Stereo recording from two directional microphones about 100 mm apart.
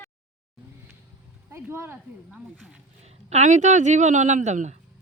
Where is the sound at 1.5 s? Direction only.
25° right (ahead or behind).